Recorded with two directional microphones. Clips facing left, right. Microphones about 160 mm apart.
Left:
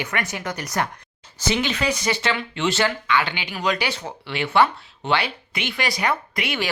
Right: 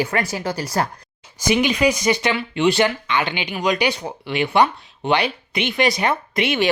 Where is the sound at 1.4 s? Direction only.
15° right (ahead or behind).